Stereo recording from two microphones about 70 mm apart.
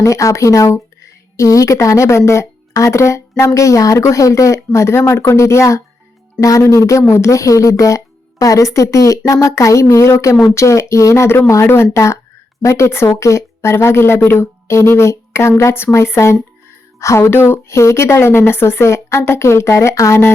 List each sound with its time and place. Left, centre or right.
0.0 s a woman's voice: left